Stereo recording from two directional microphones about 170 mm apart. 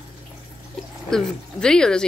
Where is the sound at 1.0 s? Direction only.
5° left (ahead or behind).